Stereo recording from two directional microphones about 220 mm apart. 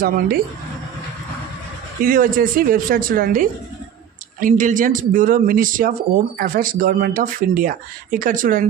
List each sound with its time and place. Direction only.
2.0 s speech: 40° right (ahead or behind)